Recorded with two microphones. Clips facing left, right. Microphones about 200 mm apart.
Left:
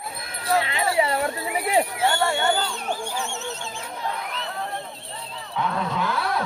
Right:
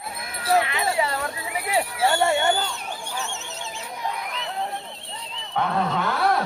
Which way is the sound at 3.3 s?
20° right (ahead or behind).